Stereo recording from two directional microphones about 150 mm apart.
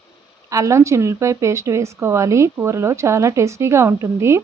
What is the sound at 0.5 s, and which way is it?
Speech, 20° right (ahead or behind).